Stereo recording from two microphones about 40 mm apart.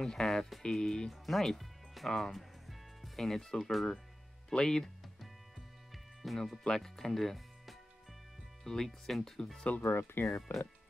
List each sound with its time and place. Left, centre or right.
0.0 s speech: centre
5.9 s music: centre
6.6 s speech: centre
9.8 s speech: left